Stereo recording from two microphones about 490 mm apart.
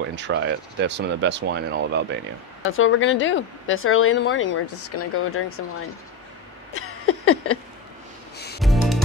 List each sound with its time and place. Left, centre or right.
0.1 s speech: right
2.6 s a woman's voice: left
6.7 s a sound: left
8.5 s music: centre